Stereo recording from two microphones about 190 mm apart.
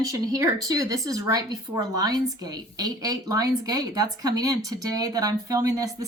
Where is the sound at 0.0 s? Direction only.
20° right (ahead or behind).